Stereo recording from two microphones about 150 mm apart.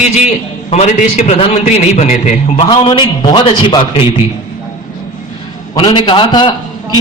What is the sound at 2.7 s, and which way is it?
A man's voice, 35° left (ahead or behind).